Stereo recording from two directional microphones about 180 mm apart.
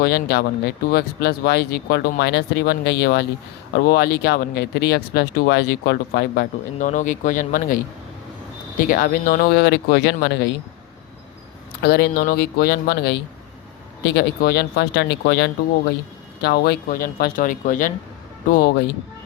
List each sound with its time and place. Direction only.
0.0 s speech: 60° left (ahead or behind)
6.7 s speech: 45° left (ahead or behind)
8.8 s speech: 50° left (ahead or behind); by 10.3 s 65° left (ahead or behind)
11.8 s speech: 60° left (ahead or behind)